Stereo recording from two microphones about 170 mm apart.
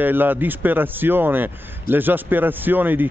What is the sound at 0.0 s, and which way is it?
Speech, 10° right (ahead or behind).